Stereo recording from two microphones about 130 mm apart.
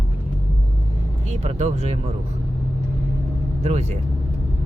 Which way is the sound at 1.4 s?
60° right (ahead or behind).